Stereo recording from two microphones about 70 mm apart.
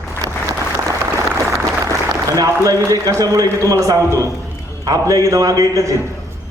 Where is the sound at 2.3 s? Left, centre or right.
Right.